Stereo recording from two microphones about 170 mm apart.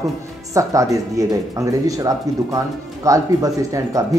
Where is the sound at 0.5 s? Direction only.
20° right (ahead or behind).